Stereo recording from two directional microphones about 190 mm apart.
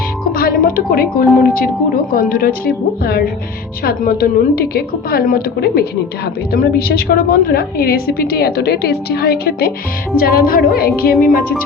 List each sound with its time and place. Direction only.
0.3 s a woman's voice: 50° left (ahead or behind)